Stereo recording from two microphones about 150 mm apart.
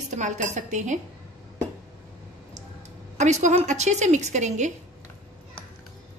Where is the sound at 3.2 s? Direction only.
55° right (ahead or behind).